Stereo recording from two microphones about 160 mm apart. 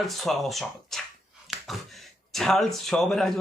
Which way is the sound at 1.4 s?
Centre (ahead or behind).